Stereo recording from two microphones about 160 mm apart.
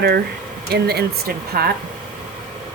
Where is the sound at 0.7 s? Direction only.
85° right.